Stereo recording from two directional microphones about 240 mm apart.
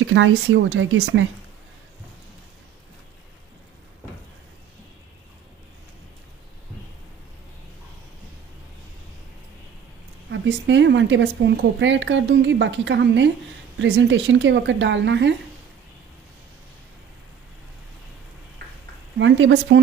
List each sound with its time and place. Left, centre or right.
0.1 s a woman's voice: right
10.3 s a woman's voice: right
19.1 s a woman's voice: right